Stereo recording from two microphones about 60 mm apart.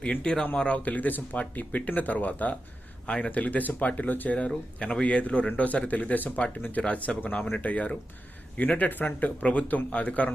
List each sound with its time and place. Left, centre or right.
0.0 s speech: centre
4.4 s speech: centre